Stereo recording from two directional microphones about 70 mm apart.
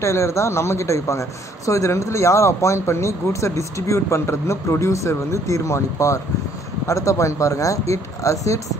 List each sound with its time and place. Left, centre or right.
0.0 s speech: left